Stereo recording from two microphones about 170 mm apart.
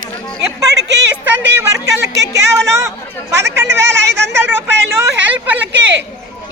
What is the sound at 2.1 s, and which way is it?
Speech, 90° right.